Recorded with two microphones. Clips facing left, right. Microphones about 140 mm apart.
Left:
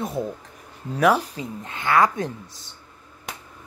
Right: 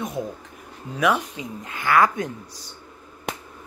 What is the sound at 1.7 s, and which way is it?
Speech, 25° left (ahead or behind).